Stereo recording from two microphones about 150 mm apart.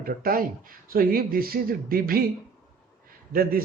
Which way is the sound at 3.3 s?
75° right (ahead or behind).